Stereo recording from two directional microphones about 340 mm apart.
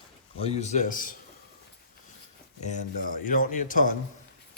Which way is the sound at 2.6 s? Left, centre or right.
Left.